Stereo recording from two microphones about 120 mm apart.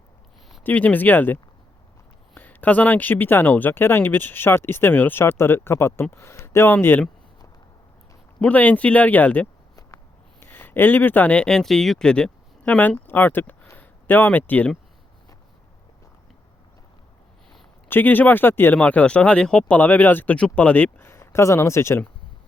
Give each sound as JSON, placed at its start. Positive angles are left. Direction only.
{"t": 0.6, "sound": "speech", "side_deg": 15}
{"t": 8.4, "sound": "speech", "side_deg": 10}
{"t": 17.8, "sound": "speech", "side_deg": 15}